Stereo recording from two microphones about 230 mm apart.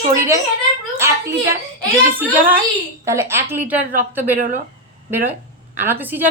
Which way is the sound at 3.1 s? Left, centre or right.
Centre.